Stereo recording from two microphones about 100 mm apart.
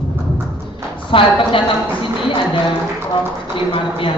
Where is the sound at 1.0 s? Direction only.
60° left (ahead or behind).